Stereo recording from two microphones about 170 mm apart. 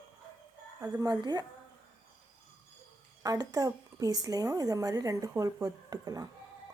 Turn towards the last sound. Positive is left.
turn(degrees=-20)  # may be behind; listen again after turning